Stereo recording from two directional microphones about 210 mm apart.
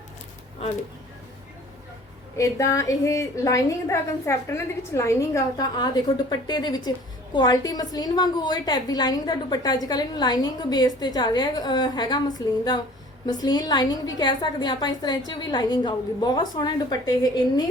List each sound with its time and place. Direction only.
2.4 s a woman's voice: 15° left (ahead or behind)